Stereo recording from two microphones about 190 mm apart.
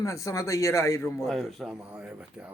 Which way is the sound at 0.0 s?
15° left (ahead or behind).